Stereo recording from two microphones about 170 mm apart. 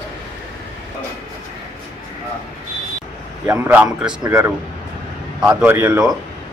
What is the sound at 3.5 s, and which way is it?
A man's voice, 10° right (ahead or behind).